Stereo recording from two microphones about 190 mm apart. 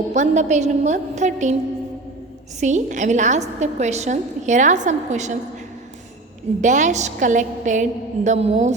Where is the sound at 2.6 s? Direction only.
40° right (ahead or behind).